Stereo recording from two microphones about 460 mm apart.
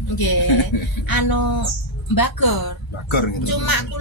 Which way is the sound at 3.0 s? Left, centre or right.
Left.